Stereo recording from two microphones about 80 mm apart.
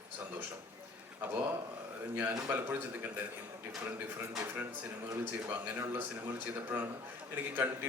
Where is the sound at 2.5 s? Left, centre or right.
Right.